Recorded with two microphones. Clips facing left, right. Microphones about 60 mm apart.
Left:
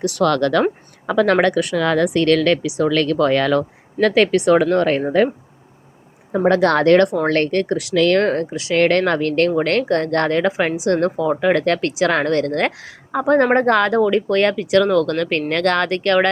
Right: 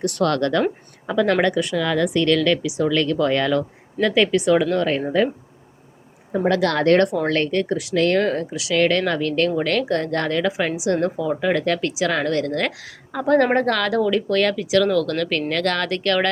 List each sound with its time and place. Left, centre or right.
0.0 s speech: left
1.0 s a woman's voice: left
4.0 s a woman's voice: left
6.5 s speech: left
7.3 s a woman's voice: left
8.2 s a woman's voice: left
13.1 s speech: left